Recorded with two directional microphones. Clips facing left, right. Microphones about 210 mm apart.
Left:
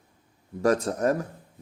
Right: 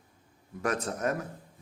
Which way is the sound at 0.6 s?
30° left (ahead or behind).